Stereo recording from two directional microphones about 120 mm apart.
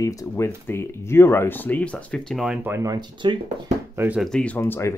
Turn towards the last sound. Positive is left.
turn(degrees=20)  # may be behind; listen again after turning